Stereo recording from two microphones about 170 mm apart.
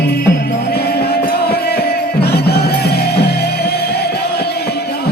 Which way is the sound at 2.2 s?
70° left (ahead or behind).